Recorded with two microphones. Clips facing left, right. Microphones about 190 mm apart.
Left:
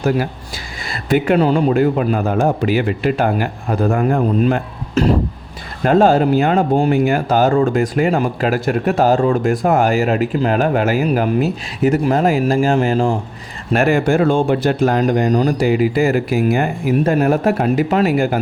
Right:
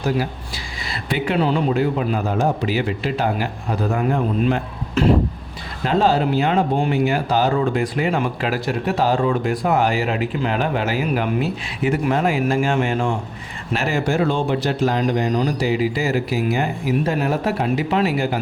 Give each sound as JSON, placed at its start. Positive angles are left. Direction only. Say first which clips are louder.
{"t": 0.9, "sound": "speech", "louder": "left 8 dB", "side_deg": 50}
{"t": 13.7, "sound": "speech", "louder": "left 6 dB", "side_deg": 55}